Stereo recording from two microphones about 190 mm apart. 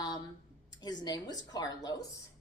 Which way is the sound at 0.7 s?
20° left (ahead or behind).